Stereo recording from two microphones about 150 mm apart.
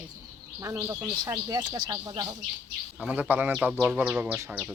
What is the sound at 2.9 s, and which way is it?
Speech, 10° right (ahead or behind).